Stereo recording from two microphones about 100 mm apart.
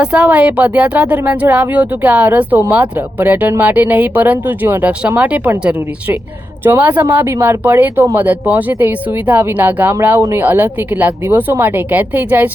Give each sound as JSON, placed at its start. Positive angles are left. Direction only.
{"t": 0.0, "sound": "speech", "side_deg": -10}